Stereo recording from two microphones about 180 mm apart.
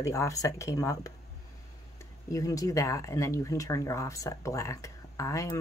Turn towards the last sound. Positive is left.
turn(degrees=20)  # may be behind; listen again after turning